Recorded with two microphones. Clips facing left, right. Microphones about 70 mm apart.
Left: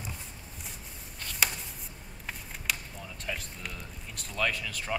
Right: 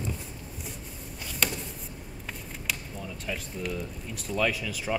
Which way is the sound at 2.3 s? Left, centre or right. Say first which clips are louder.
Even; centre.